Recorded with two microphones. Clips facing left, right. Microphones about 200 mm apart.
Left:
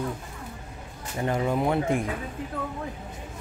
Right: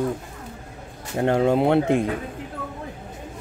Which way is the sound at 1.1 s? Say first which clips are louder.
Right 7 dB; 70° right (ahead or behind).